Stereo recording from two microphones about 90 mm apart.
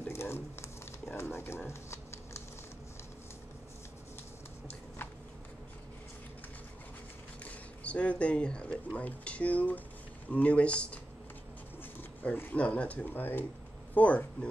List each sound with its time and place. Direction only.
0.0 s a sound: 30° left (ahead or behind)
1.1 s speech: 25° left (ahead or behind)
1.7 s shuffling cards: 30° left (ahead or behind)
7.4 s speech: 15° left (ahead or behind)
12.0 s speech: 20° left (ahead or behind)